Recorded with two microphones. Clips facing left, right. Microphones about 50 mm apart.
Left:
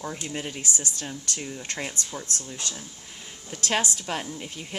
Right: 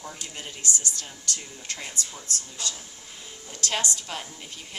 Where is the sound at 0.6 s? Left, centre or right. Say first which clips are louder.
Even; right.